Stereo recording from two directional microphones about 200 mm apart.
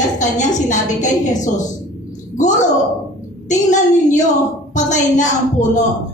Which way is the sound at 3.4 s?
40° left (ahead or behind).